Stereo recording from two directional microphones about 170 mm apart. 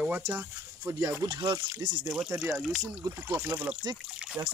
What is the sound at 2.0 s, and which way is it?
Speech, 5° right (ahead or behind).